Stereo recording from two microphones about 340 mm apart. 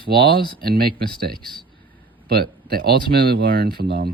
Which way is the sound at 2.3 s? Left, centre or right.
Right.